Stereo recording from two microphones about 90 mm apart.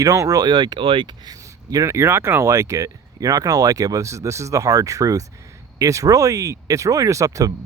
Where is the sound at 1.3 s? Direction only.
40° right (ahead or behind).